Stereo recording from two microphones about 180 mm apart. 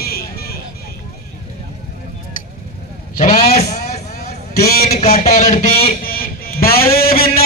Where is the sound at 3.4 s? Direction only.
35° left (ahead or behind).